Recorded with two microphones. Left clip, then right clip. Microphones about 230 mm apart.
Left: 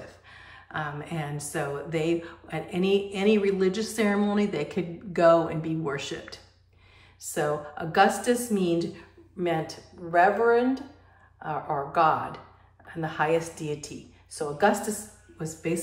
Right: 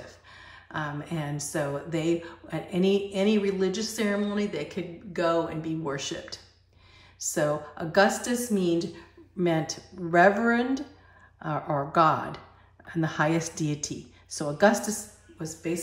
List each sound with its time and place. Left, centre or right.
0.3 s music: centre
7.2 s a woman's voice: right
8.5 s music: centre
9.4 s a woman's voice: right; by 15.8 s centre